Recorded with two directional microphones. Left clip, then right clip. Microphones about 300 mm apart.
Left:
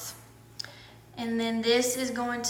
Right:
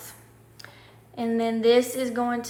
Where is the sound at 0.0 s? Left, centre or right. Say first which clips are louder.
Left 3 dB; centre.